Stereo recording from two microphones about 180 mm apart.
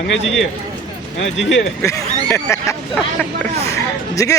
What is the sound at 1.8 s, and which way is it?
Speech, 15° left (ahead or behind).